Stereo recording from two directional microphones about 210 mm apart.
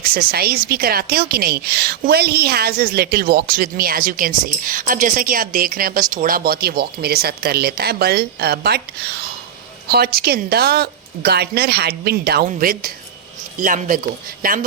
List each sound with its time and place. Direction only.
0.0 s speech: 45° right (ahead or behind)